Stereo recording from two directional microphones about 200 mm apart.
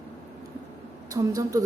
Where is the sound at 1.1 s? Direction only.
15° right (ahead or behind).